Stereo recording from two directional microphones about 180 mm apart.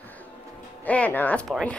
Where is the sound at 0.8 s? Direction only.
10° left (ahead or behind).